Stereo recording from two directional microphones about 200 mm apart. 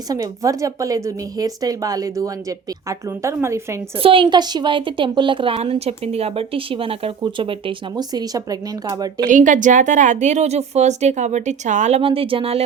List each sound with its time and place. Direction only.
0.1 s speech: 15° right (ahead or behind)
4.0 s a woman's voice: 25° right (ahead or behind)
9.2 s a woman's voice: 40° right (ahead or behind)